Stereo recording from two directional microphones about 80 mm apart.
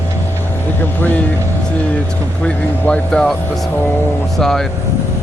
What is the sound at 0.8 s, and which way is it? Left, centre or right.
Speech, left.